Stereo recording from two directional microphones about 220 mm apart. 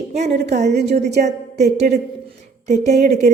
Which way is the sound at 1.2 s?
30° right (ahead or behind).